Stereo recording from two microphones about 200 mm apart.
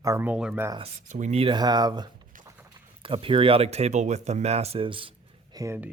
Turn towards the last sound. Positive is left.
turn(degrees=-15)  # may be behind; listen again after turning